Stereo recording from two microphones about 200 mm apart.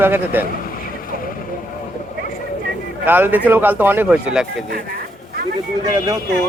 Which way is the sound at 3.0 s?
10° right (ahead or behind).